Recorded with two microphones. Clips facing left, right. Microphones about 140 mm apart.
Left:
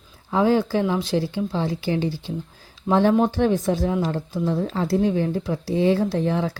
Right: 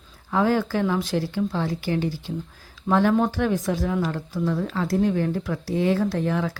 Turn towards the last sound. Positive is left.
turn(degrees=25)  # may be behind; listen again after turning